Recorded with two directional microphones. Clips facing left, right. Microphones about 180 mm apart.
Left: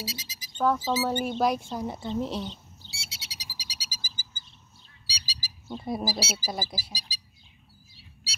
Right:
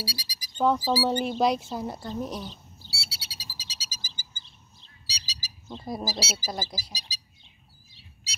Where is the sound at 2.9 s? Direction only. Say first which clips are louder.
Right 2 dB; 20° left (ahead or behind).